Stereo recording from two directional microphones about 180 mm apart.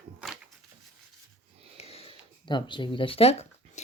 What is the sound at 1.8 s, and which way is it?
Wheeze, 35° left (ahead or behind).